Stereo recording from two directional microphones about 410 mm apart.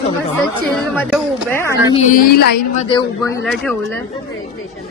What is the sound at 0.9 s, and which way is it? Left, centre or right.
Speech, centre.